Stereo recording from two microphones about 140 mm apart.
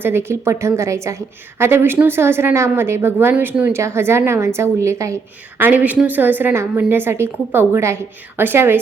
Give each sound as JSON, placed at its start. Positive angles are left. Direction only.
{"t": 0.0, "sound": "a woman's voice", "side_deg": -15}